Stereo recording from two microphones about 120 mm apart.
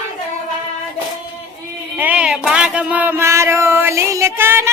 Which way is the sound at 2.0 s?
10° right (ahead or behind).